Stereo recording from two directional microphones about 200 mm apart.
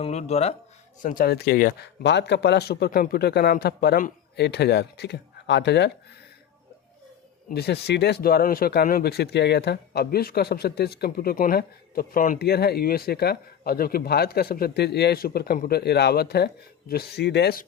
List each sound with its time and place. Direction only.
0.0 s speech: 30° left (ahead or behind)
1.0 s speech: 50° left (ahead or behind)
2.0 s speech: 60° left (ahead or behind)
7.5 s speech: 55° left (ahead or behind)